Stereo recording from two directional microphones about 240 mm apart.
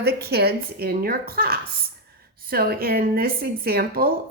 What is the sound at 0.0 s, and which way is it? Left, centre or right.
A woman's voice, right.